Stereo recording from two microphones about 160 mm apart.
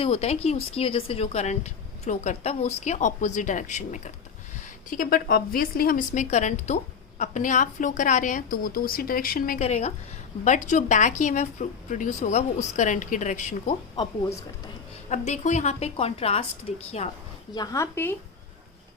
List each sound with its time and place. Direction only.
0.0 s a woman's voice: 40° left (ahead or behind); by 9.6 s 65° left (ahead or behind)
9.6 s a woman's voice: 45° left (ahead or behind)
15.1 s speech: 45° left (ahead or behind)
17.5 s speech: 25° left (ahead or behind)